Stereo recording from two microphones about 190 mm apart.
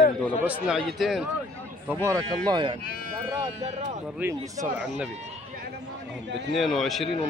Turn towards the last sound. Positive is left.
turn(degrees=0)  # may be behind; listen again after turning